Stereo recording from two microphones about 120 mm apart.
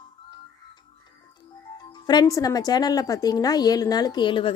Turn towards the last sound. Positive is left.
turn(degrees=45)  # may be behind; listen again after turning